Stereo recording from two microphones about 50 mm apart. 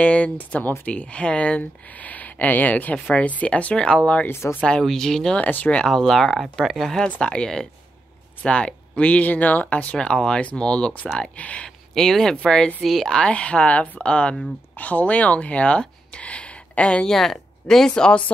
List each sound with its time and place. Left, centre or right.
0.0 s speech: left
4.3 s speech: left
4.8 s speech: centre
5.3 s speech: left
5.9 s speech: centre; by 9.9 s left
9.9 s speech: centre
11.9 s speech: centre
13.2 s speech: left
14.8 s speech: left
17.1 s speech: centre